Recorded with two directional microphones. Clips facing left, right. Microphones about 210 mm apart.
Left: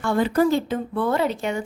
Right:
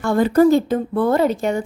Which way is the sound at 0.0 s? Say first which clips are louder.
Right 5 dB; 45° right (ahead or behind).